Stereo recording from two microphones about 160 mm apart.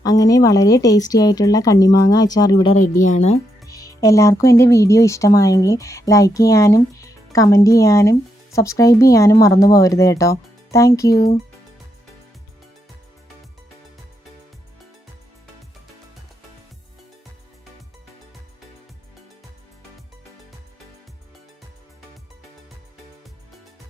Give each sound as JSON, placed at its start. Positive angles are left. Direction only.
{"t": 0.0, "sound": "speech", "side_deg": 25}
{"t": 3.0, "sound": "speech", "side_deg": 45}
{"t": 3.6, "sound": "speech", "side_deg": 20}